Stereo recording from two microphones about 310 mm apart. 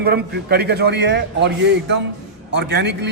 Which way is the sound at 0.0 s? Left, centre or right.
Right.